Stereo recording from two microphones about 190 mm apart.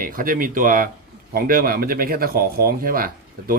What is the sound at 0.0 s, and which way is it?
Speech, 45° right (ahead or behind).